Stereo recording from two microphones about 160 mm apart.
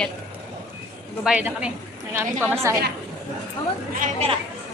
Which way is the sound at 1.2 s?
5° right (ahead or behind).